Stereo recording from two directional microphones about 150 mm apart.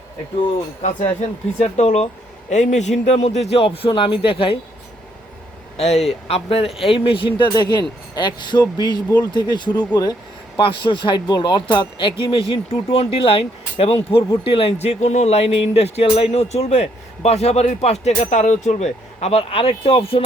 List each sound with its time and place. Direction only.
0.8 s speech: 50° left (ahead or behind)
5.7 s a man's voice: 45° left (ahead or behind)